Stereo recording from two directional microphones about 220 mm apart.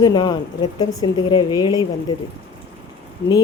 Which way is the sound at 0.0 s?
20° left (ahead or behind).